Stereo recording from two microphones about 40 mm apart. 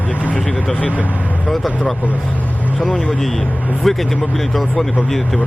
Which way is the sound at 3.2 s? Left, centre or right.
Centre.